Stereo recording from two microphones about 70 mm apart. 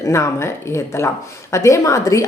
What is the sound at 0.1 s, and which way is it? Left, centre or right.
Speech, left.